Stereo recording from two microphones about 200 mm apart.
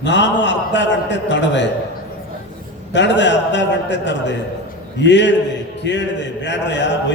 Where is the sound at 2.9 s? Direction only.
65° left (ahead or behind).